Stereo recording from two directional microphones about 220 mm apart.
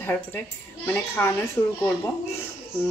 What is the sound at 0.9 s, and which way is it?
Speech, 10° left (ahead or behind).